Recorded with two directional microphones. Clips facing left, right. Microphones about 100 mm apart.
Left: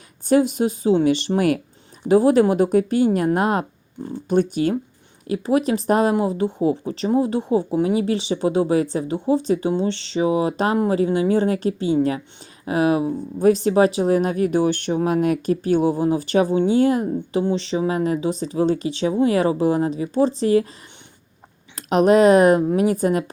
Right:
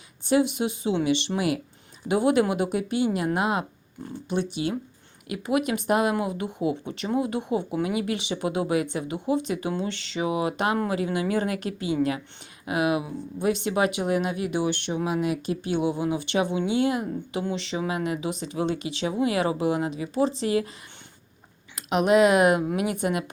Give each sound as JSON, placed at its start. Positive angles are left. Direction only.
{"t": 0.3, "sound": "speech", "side_deg": 40}
{"t": 5.3, "sound": "speech", "side_deg": 35}
{"t": 21.8, "sound": "speech", "side_deg": 40}